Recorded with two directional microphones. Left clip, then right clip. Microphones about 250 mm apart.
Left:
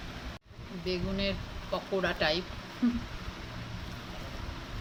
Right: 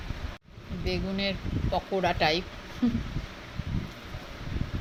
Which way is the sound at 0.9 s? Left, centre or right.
Centre.